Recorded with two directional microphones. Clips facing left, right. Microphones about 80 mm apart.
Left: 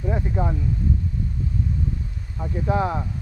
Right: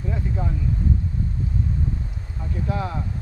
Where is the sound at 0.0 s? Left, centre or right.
Left.